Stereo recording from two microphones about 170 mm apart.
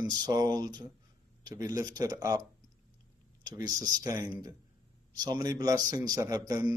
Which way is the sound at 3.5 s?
25° right (ahead or behind).